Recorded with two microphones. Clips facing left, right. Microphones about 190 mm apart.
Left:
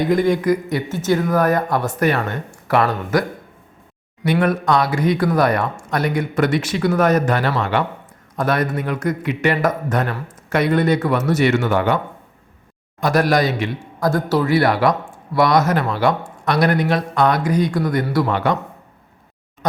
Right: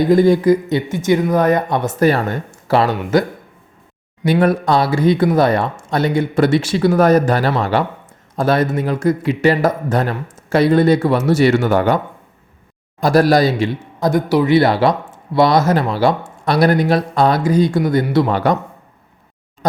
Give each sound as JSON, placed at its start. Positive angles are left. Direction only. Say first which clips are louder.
{"t": 0.1, "sound": "speech", "louder": "right 6 dB", "side_deg": -35}
{"t": 0.9, "sound": "speech", "louder": "right 2 dB", "side_deg": -15}
{"t": 2.5, "sound": "a sound", "louder": "right 2 dB", "side_deg": -25}
{"t": 3.1, "sound": "speech", "louder": "right 4 dB", "side_deg": -25}
{"t": 13.0, "sound": "speech", "louder": "right 4 dB", "side_deg": -35}
{"t": 14.1, "sound": "a man's voice", "louder": "right 4 dB", "side_deg": -15}
{"t": 14.5, "sound": "speech", "louder": "right 3 dB", "side_deg": -25}
{"t": 18.3, "sound": "speech", "louder": "right 3 dB", "side_deg": -35}